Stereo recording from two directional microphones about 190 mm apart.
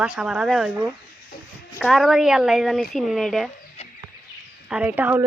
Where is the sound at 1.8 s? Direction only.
Centre (ahead or behind).